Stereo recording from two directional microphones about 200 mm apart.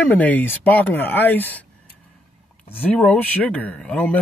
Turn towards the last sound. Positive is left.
turn(degrees=5)  # may be behind; listen again after turning